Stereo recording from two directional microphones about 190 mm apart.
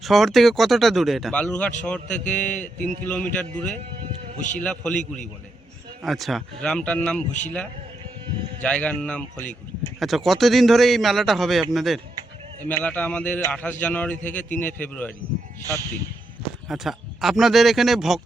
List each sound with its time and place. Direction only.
0.0 s speech: centre (ahead or behind)
2.7 s a man's voice: 45° right (ahead or behind)
3.0 s speech: 5° left (ahead or behind)
8.6 s speech: 5° left (ahead or behind)
16.6 s speech: centre (ahead or behind)